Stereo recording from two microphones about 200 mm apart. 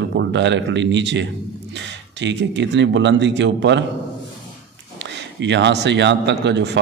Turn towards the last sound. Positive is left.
turn(degrees=-60)  # may be behind; listen again after turning